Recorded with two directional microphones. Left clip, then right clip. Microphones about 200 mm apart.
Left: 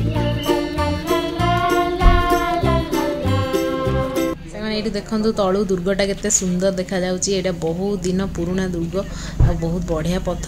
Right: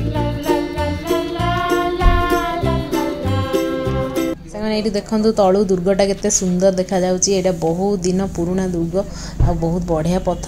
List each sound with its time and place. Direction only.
0.5 s music: centre (ahead or behind)
4.6 s a woman's voice: 10° right (ahead or behind)
5.4 s a woman's voice: centre (ahead or behind)
9.8 s speech: 5° right (ahead or behind)